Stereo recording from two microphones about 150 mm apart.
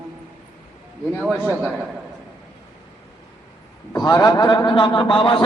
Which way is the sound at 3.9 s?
25° left (ahead or behind).